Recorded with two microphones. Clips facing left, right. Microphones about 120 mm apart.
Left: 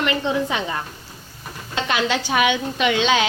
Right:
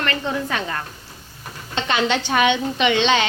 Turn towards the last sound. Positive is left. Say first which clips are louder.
# right 1 dB
turn(degrees=5)  # may be behind; listen again after turning